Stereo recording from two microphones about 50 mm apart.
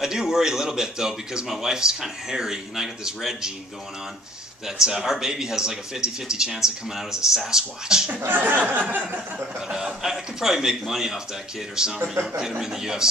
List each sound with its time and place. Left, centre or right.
0.0 s speech: centre
4.6 s speech: centre
8.3 s speech: right
9.7 s speech: centre